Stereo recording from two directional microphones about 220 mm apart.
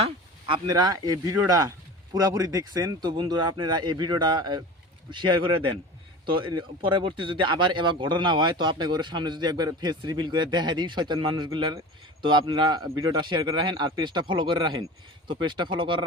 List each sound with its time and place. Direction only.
0.5 s speech: 20° right (ahead or behind)